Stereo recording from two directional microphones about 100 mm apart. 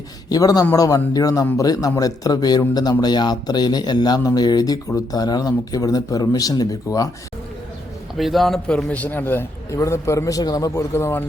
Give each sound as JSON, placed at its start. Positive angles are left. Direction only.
{"t": 0.3, "sound": "a man's voice", "side_deg": 40}
{"t": 8.2, "sound": "a man's voice", "side_deg": 0}